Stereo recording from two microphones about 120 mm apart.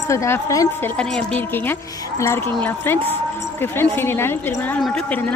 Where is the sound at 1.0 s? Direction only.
10° left (ahead or behind).